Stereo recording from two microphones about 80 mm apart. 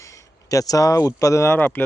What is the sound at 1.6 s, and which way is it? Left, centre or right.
Speech, left.